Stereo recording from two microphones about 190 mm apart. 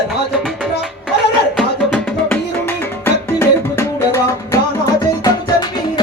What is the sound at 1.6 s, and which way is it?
Music, 5° left (ahead or behind).